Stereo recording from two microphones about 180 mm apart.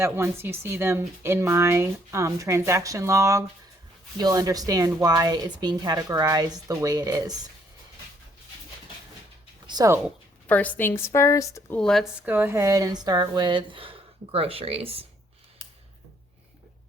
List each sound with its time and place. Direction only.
0.0 s a woman's voice: 15° right (ahead or behind)
9.6 s speech: 20° right (ahead or behind)
10.4 s a woman's voice: 10° left (ahead or behind)
11.8 s speech: centre (ahead or behind)
12.2 s a woman's voice: 10° right (ahead or behind); by 15.0 s 35° right (ahead or behind)